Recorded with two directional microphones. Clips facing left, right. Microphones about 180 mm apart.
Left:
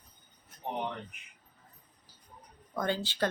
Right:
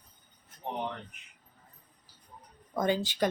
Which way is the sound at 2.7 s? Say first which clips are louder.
Right 4 dB; 15° right (ahead or behind).